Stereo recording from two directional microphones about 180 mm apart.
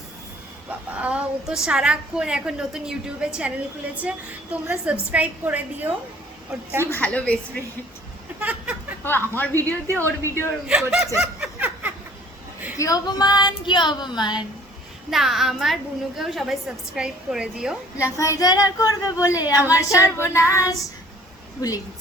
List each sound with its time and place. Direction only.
0.7 s a woman's voice: 5° right (ahead or behind)
6.9 s speech: 10° left (ahead or behind)
8.4 s a sound: 10° right (ahead or behind)
9.0 s speech: 10° left (ahead or behind)
9.8 s a woman's voice: 15° right (ahead or behind)
10.7 s a woman's voice: 5° right (ahead or behind)
11.2 s snicker: 5° right (ahead or behind)
12.7 s speech: 20° left (ahead or behind)
15.1 s a woman's voice: centre (ahead or behind)
18.2 s speech: 20° left (ahead or behind)
19.5 s a woman's voice: 10° right (ahead or behind)
19.9 s speech: 15° left (ahead or behind)
20.2 s a woman's voice: 10° right (ahead or behind)
20.5 s speech: 15° left (ahead or behind)